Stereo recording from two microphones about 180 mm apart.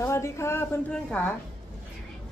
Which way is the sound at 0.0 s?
15° left (ahead or behind).